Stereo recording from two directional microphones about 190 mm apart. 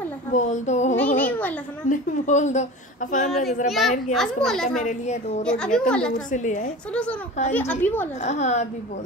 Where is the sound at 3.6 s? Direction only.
Centre (ahead or behind).